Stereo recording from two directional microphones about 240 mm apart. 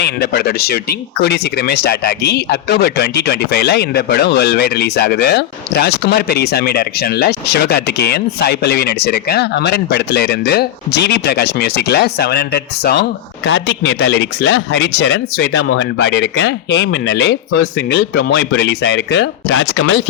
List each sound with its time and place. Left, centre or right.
0.0 s speech: left